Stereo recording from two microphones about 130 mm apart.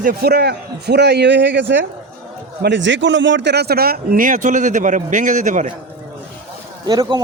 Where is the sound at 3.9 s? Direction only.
90° right.